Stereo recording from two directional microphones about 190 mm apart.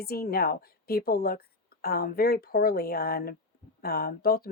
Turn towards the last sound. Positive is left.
turn(degrees=50)  # may be behind; listen again after turning